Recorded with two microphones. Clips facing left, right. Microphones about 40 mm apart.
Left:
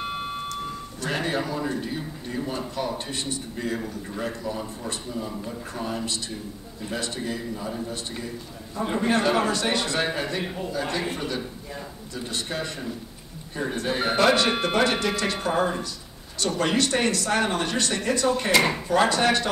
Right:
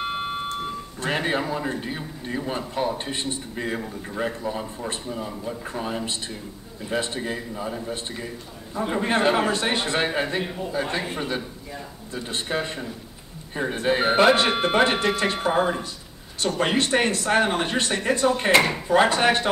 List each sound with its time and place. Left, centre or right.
0.0 s alarm clock: right
1.0 s a man's voice: right
10.4 s a man's voice: centre
10.7 s a man's voice: right